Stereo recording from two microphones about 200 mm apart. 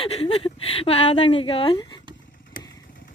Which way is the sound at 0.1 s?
30° left (ahead or behind).